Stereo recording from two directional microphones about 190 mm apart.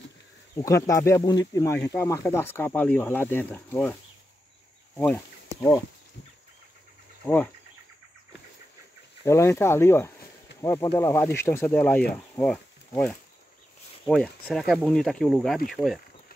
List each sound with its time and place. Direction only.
0.6 s speech: 15° left (ahead or behind)
9.2 s speech: 15° left (ahead or behind); by 16.0 s centre (ahead or behind)